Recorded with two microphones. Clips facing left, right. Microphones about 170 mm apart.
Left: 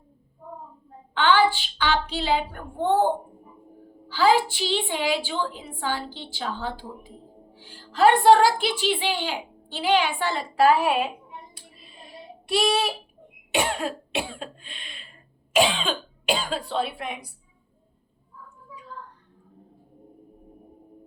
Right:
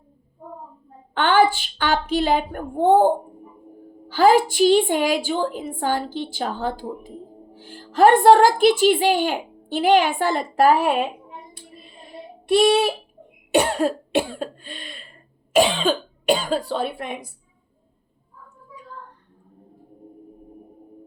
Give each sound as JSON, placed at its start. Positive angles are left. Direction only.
{"t": 1.1, "sound": "a woman's voice", "side_deg": -50}
{"t": 4.1, "sound": "a woman's voice", "side_deg": -50}
{"t": 13.5, "sound": "a woman's voice", "side_deg": -40}